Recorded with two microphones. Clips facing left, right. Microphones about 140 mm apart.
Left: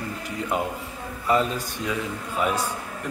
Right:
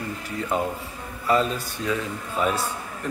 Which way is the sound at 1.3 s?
15° left (ahead or behind).